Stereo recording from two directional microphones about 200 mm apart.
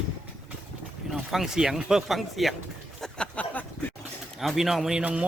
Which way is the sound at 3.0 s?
5° left (ahead or behind).